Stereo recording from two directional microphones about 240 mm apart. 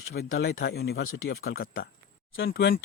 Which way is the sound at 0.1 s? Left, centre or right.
Left.